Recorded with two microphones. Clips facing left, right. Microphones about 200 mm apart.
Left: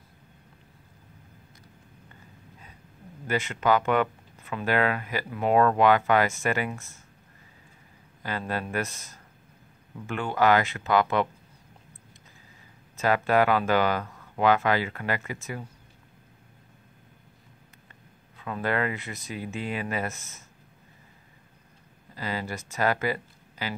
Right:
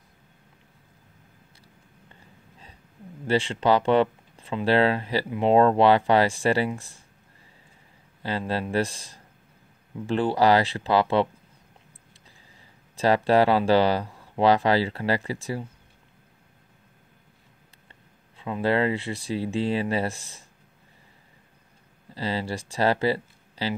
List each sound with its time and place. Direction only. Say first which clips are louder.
3.3 s speech: right 3 dB; 30° right (ahead or behind)
8.2 s speech: right 3 dB; 30° right (ahead or behind)
12.9 s speech: right 3 dB; 35° right (ahead or behind)
18.4 s speech: right 5 dB; 25° right (ahead or behind)
22.1 s speech: right 4 dB; 30° right (ahead or behind)